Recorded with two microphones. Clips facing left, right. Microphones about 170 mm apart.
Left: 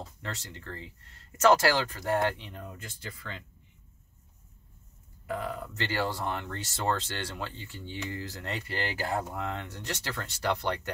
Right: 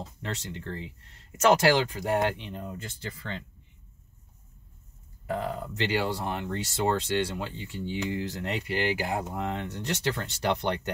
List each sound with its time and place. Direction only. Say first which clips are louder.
0.2 s speech: right 7 dB; 20° right (ahead or behind)
5.2 s speech: right 3 dB; 30° right (ahead or behind)
5.8 s speech: right 3 dB; 15° right (ahead or behind)